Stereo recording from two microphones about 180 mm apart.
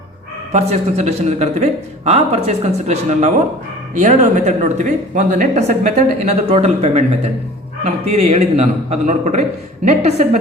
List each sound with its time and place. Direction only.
0.5 s speech: 35° right (ahead or behind)
8.1 s speech: 35° right (ahead or behind)